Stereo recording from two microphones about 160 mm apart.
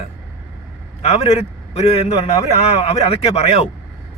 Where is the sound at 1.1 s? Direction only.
40° left (ahead or behind).